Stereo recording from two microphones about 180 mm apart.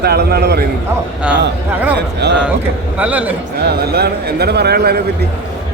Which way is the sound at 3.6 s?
60° right (ahead or behind).